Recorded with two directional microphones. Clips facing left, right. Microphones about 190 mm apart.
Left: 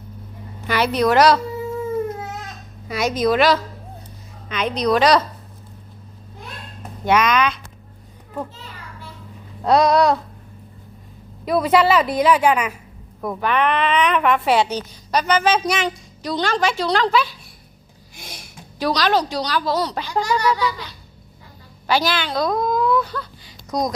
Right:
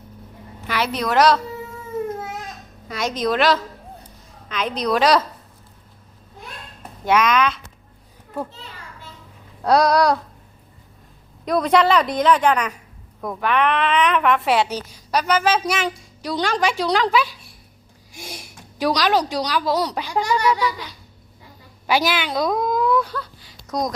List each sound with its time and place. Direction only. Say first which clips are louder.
0.7 s a woman's voice: left 5 dB; centre (ahead or behind)
2.9 s a woman's voice: left 3 dB; 5° left (ahead or behind)
7.0 s a woman's voice: even; centre (ahead or behind)
9.6 s a woman's voice: left 1 dB; centre (ahead or behind)
11.4 s a woman's voice: left 1 dB; 5° left (ahead or behind)
20.6 s a woman's voice: even; 15° right (ahead or behind)
22.4 s baby cry: left 1 dB; 5° right (ahead or behind)